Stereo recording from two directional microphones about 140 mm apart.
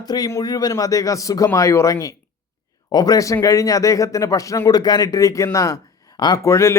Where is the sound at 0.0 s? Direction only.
30° left (ahead or behind).